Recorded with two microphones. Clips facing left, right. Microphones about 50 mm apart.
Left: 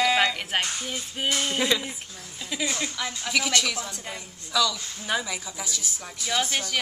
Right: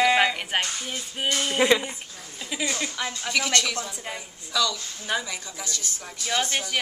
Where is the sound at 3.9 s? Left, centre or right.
Centre.